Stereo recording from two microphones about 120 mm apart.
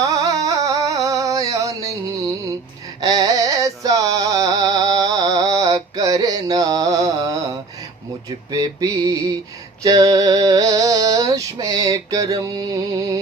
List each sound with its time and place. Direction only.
0.0 s a sound: 30° right (ahead or behind)
3.0 s music: 30° right (ahead or behind)
8.4 s music: 30° right (ahead or behind)